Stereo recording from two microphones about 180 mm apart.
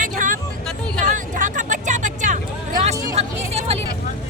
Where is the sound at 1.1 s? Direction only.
45° right (ahead or behind).